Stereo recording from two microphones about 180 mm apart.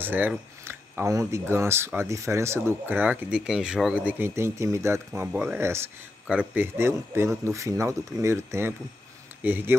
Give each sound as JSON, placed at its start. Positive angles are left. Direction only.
{"t": 0.0, "sound": "speech", "side_deg": -10}